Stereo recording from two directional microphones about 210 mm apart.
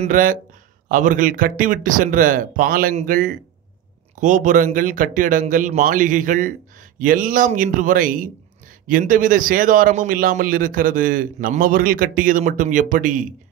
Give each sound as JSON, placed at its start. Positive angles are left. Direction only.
{"t": 0.0, "sound": "a man's voice", "side_deg": -40}